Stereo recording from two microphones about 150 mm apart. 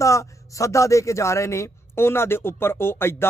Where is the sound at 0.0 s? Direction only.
20° left (ahead or behind).